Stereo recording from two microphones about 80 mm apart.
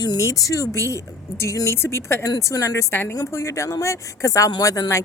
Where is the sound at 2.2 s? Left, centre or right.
Left.